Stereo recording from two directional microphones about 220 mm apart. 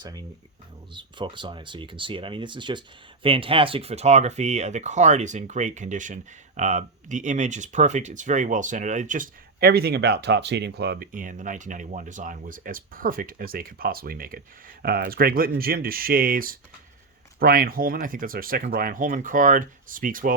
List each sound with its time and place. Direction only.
0.0 s speech: 15° right (ahead or behind); by 20.3 s 40° right (ahead or behind)